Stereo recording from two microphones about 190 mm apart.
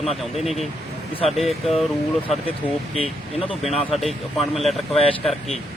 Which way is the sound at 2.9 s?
30° left (ahead or behind).